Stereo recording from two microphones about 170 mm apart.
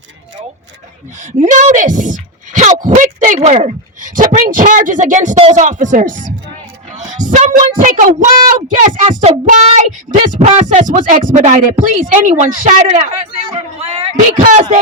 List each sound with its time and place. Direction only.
1.2 s speech: 45° right (ahead or behind)
7.3 s child singing: 50° right (ahead or behind)
8.7 s speech: 50° right (ahead or behind)
14.3 s speech: 45° right (ahead or behind)